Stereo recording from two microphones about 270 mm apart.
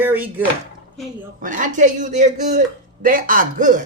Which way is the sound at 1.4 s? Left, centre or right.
Right.